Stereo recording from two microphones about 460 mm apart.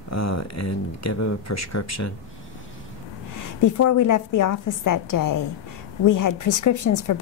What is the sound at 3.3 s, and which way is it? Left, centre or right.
A woman's voice, left.